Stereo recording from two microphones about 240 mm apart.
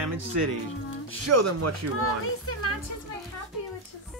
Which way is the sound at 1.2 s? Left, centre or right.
Right.